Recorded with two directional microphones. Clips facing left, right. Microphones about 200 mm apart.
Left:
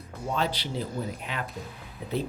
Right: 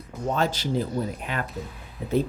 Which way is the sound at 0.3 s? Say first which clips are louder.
Right 4 dB; 45° right (ahead or behind).